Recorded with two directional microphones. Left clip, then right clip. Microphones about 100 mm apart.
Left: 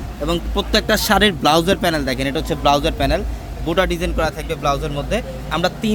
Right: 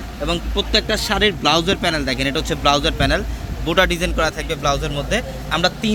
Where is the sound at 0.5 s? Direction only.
90° left; by 2.1 s 50° left (ahead or behind).